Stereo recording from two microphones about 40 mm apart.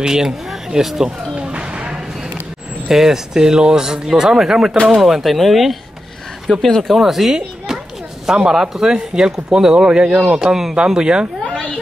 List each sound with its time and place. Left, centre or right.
0.0 s speech: centre
1.4 s a sound: right
2.9 s speech: centre
4.9 s speech: centre
7.3 s children playing: centre
8.3 s speech: centre